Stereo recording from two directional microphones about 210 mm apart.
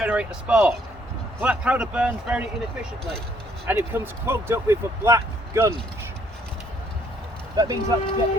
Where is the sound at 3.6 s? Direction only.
10° right (ahead or behind).